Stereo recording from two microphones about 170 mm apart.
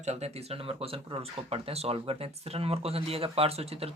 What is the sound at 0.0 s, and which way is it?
Speech, 40° right (ahead or behind).